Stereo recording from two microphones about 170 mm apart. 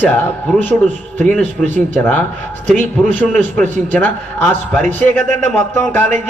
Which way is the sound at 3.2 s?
10° left (ahead or behind).